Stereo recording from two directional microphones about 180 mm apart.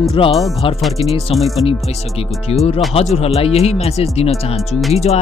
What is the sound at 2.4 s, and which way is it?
Speech, 35° left (ahead or behind).